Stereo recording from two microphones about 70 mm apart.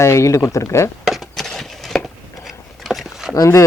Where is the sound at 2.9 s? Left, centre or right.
Centre.